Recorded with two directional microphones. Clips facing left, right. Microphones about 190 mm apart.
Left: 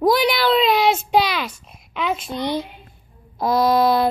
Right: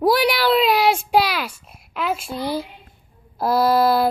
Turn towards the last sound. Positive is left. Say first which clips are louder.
# even
turn(degrees=-5)  # may be behind; listen again after turning